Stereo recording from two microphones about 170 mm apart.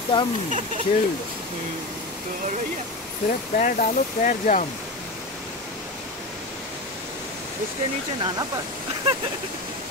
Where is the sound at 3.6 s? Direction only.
50° left (ahead or behind).